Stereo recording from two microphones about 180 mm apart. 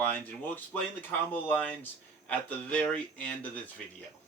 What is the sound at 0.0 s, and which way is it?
Speech, 10° left (ahead or behind).